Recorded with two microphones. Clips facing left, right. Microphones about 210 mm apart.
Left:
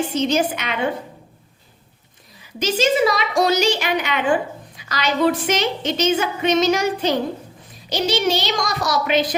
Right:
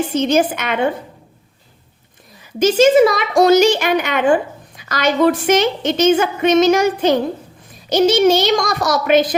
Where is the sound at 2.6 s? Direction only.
50° right (ahead or behind).